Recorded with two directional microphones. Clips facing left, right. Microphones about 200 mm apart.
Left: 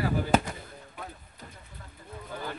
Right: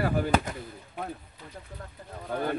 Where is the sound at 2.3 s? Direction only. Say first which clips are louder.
Right 8 dB; 60° right (ahead or behind).